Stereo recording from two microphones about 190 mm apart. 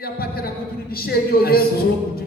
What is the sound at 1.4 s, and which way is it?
Speech, 55° left (ahead or behind).